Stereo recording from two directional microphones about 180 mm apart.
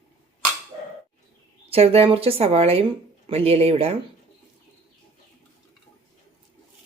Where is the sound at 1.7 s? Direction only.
35° right (ahead or behind).